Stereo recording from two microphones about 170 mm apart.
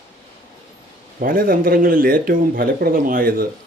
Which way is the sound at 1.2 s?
60° right (ahead or behind).